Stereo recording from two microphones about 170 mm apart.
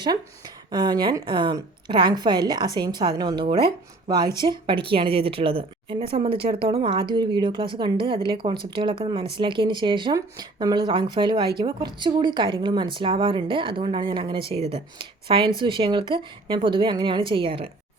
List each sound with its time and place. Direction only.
0.7 s a woman's voice: 25° right (ahead or behind)